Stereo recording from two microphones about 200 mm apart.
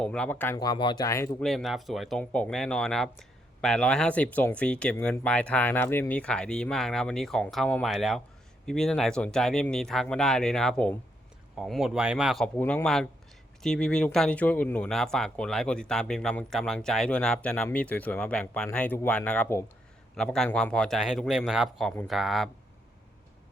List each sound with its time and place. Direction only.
0.0 s speech: 5° left (ahead or behind)
1.5 s speech: centre (ahead or behind)